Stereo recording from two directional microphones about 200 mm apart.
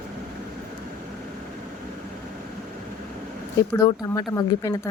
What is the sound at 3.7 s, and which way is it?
Speech, 20° left (ahead or behind).